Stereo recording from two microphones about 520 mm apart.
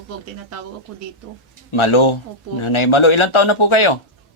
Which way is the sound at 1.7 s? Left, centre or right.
Left.